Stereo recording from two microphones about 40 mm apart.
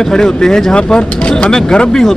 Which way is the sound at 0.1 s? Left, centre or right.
Centre.